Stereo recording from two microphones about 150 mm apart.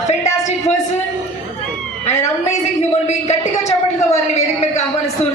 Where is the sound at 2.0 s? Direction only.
50° left (ahead or behind).